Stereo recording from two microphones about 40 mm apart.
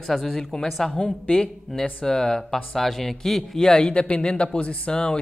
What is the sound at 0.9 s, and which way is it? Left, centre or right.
Speech, left.